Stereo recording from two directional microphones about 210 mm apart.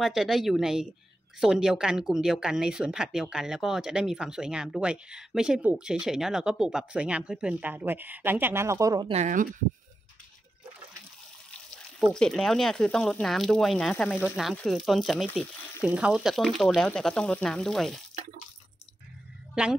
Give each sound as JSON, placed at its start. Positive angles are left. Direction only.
{"t": 0.0, "sound": "speech", "side_deg": 0}
{"t": 9.1, "sound": "speech", "side_deg": -35}
{"t": 12.0, "sound": "speech", "side_deg": 0}
{"t": 19.5, "sound": "a woman's voice", "side_deg": -5}